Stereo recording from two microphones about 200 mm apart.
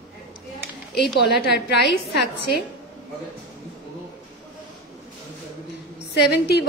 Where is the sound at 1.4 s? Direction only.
55° left (ahead or behind).